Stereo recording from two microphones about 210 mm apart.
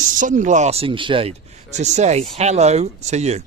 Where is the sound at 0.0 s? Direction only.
40° right (ahead or behind).